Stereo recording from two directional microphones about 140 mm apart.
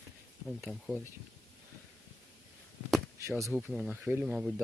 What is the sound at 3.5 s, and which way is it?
Speech, 10° right (ahead or behind).